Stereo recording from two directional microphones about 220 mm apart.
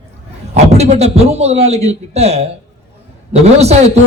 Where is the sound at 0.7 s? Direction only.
30° right (ahead or behind).